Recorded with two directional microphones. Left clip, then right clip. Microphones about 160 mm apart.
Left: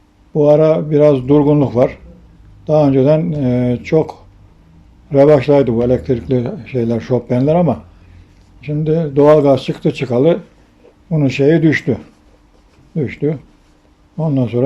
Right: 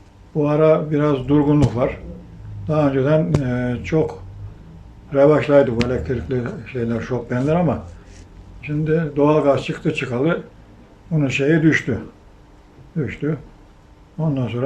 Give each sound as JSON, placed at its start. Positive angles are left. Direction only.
{"t": 0.3, "sound": "speech", "side_deg": 35}
{"t": 5.1, "sound": "speech", "side_deg": 35}
{"t": 13.0, "sound": "speech", "side_deg": 35}